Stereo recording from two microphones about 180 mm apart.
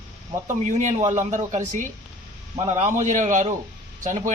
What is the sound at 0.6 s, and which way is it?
Speech, 40° right (ahead or behind).